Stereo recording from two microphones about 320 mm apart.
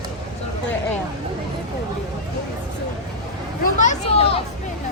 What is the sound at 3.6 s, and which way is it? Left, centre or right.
Speech, left.